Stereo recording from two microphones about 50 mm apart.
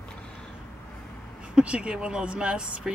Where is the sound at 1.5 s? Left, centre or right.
Right.